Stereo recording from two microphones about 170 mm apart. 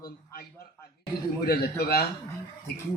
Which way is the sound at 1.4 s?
65° left (ahead or behind).